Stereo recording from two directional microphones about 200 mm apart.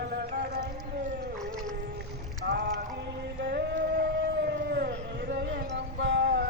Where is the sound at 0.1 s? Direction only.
50° right (ahead or behind).